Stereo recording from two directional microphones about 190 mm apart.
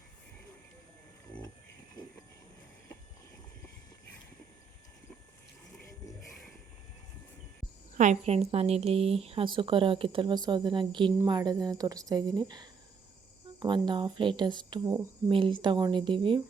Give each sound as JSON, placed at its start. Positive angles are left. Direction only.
{"t": 7.9, "sound": "a woman's voice", "side_deg": -40}